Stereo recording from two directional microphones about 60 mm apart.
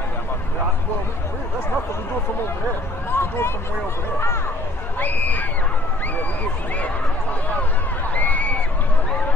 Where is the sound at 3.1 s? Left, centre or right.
Left.